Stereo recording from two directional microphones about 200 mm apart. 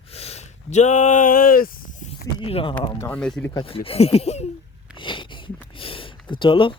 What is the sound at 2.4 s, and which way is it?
Speech, 25° left (ahead or behind).